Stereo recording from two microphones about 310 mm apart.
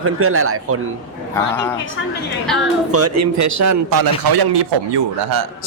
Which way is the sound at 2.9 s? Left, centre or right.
Right.